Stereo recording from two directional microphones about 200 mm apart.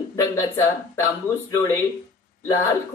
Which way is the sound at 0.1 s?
15° left (ahead or behind).